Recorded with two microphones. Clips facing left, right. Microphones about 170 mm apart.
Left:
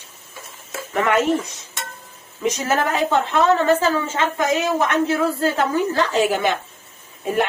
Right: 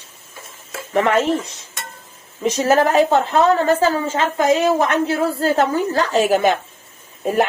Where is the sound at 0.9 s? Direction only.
30° right (ahead or behind).